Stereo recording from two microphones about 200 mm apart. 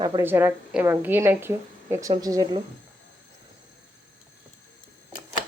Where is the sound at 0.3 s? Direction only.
10° right (ahead or behind).